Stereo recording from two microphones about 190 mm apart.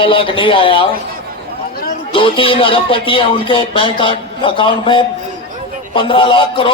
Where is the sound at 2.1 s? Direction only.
25° left (ahead or behind).